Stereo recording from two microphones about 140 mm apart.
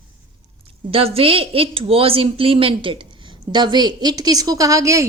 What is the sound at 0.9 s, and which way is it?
A woman's voice, 45° right (ahead or behind).